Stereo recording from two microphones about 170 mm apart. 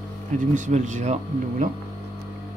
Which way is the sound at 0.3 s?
45° right (ahead or behind).